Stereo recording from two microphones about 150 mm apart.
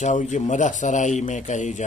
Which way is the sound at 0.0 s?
55° left (ahead or behind).